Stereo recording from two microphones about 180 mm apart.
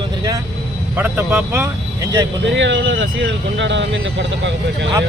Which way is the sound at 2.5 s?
85° right.